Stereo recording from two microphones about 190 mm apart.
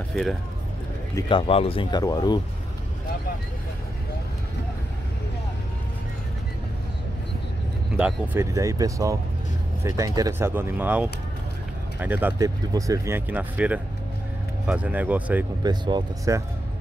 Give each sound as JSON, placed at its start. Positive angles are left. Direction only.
{"t": 0.1, "sound": "speech", "side_deg": 0}
{"t": 1.1, "sound": "speech", "side_deg": 25}
{"t": 8.0, "sound": "speech", "side_deg": -10}
{"t": 15.6, "sound": "speech", "side_deg": -20}